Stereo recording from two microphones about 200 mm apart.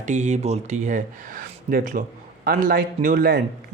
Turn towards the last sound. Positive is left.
turn(degrees=-45)  # may be behind; listen again after turning